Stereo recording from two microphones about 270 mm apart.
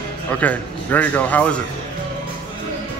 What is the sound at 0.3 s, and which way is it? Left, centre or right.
A man's voice, centre.